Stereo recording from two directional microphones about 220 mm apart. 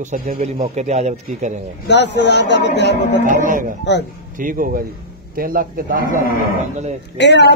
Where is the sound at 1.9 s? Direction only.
50° left (ahead or behind).